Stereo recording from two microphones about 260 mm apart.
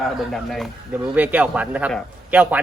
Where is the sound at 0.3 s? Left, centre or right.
Centre.